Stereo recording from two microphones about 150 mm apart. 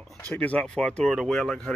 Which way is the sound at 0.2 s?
10° left (ahead or behind).